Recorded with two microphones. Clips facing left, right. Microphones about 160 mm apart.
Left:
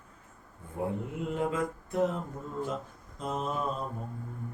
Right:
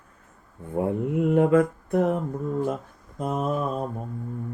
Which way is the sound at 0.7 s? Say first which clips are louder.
Right 9 dB; 60° right (ahead or behind).